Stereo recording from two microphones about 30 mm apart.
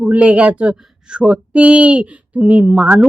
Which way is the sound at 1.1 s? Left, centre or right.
Right.